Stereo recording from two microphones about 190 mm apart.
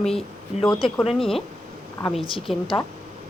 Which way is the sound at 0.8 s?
30° left (ahead or behind).